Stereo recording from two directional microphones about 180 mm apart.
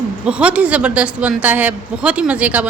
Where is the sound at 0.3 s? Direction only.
5° right (ahead or behind).